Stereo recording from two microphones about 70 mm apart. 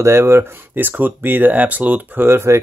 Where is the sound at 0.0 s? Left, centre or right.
Right.